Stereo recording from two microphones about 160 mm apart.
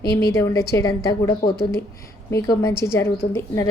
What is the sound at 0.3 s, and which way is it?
A woman's voice, 20° left (ahead or behind).